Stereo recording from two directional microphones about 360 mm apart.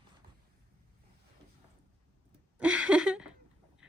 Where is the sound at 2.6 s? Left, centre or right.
Centre.